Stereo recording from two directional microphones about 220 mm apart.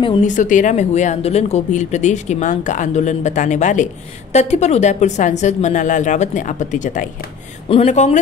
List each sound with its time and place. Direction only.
0.4 s speech: 35° left (ahead or behind)